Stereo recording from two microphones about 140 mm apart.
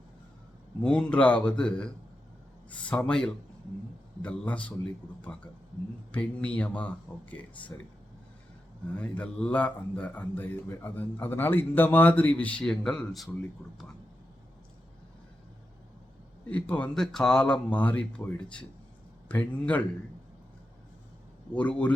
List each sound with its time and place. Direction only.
0.8 s a man's voice: 5° left (ahead or behind)
9.0 s a man's voice: 10° left (ahead or behind)
16.5 s a man's voice: 10° left (ahead or behind)
21.5 s a man's voice: 10° left (ahead or behind)